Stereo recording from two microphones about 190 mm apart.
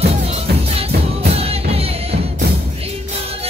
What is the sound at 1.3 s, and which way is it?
Music, 30° right (ahead or behind).